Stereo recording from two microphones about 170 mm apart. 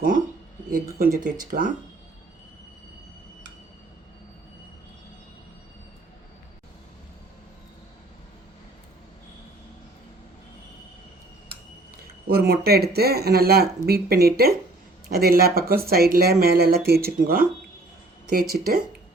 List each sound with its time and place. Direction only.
0.9 s speech: 55° right (ahead or behind)
12.3 s speech: 65° right (ahead or behind)